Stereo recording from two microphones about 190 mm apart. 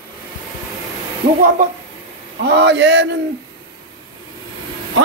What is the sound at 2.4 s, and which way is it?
Speech, 65° right (ahead or behind).